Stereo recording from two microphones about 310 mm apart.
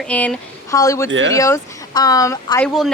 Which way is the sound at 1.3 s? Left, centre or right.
Centre.